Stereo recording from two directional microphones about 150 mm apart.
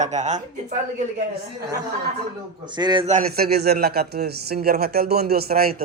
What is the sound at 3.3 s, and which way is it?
Speech, 90° right.